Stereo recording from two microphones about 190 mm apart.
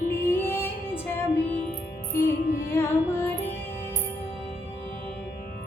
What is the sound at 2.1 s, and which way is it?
Music, 15° left (ahead or behind).